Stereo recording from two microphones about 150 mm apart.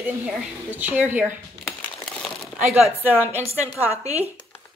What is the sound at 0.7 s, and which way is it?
Speech, 10° right (ahead or behind).